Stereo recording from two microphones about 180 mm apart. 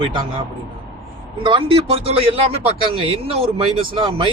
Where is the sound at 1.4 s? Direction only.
30° right (ahead or behind).